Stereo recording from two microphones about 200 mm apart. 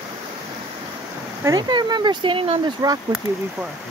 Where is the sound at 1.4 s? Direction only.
20° right (ahead or behind).